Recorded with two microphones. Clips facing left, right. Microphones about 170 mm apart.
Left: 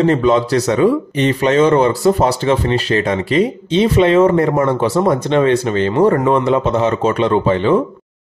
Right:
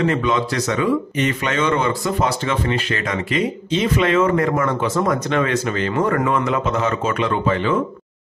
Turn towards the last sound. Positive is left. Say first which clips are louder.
# left 6 dB
turn(degrees=30)  # may be behind; listen again after turning